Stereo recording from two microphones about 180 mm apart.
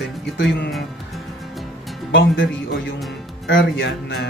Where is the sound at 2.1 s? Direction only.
90° left.